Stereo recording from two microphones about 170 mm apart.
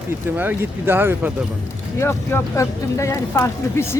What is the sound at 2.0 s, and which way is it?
Speech, 15° left (ahead or behind).